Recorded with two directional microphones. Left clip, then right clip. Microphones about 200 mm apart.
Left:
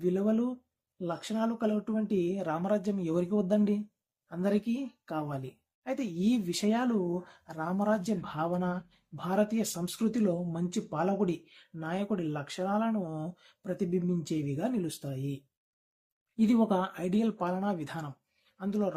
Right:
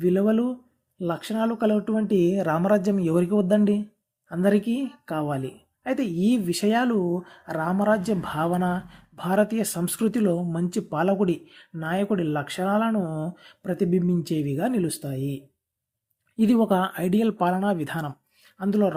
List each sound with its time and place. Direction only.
0.0 s speech: 30° right (ahead or behind)